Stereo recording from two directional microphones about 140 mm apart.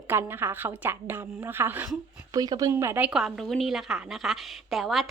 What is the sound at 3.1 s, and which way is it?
A woman's voice, 5° right (ahead or behind).